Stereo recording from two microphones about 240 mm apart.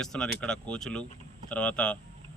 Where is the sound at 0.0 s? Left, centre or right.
Centre.